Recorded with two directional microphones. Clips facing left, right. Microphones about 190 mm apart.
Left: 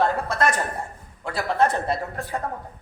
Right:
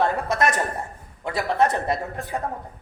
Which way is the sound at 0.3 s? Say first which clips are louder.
Right 1 dB; 20° right (ahead or behind).